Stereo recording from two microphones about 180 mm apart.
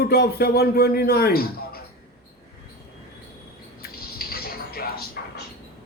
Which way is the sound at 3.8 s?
55° left (ahead or behind).